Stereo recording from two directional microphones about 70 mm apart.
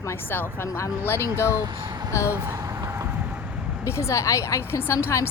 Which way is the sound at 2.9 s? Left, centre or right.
Right.